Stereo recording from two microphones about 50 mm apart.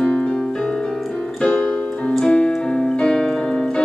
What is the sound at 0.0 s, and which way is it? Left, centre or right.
Music, centre.